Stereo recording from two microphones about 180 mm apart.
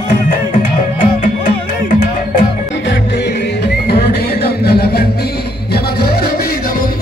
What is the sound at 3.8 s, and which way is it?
Music, 60° left (ahead or behind).